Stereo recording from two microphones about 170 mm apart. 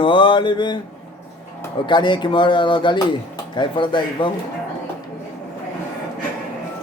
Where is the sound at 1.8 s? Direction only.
25° left (ahead or behind).